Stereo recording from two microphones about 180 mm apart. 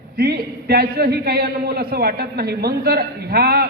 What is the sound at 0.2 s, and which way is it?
A man's voice, 60° right (ahead or behind).